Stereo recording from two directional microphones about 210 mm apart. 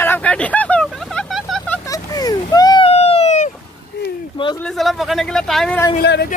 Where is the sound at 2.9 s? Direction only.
30° left (ahead or behind).